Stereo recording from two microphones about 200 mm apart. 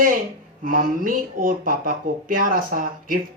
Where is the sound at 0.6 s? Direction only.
45° right (ahead or behind).